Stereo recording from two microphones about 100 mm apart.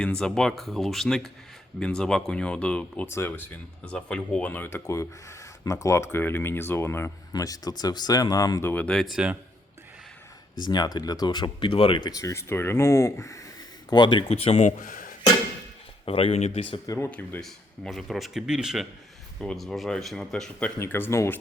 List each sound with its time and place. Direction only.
0.0 s speech: 10° left (ahead or behind)
3.1 s speech: 25° left (ahead or behind)
4.9 s speech: 30° left (ahead or behind)
8.6 s speech: 15° left (ahead or behind)
9.1 s speech: 15° right (ahead or behind)
10.7 s speech: 45° left (ahead or behind)
12.2 s speech: 30° left (ahead or behind)
13.9 s speech: 50° left (ahead or behind)
14.3 s speech: 90° left
16.0 s speech: 75° left (ahead or behind)
16.6 s speech: 65° left (ahead or behind)
17.0 s speech: 20° left (ahead or behind)
17.4 s speech: centre (ahead or behind)
20.7 s speech: 25° left (ahead or behind)